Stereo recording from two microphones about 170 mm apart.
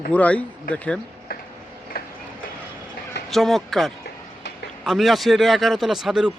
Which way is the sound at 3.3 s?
Centre (ahead or behind).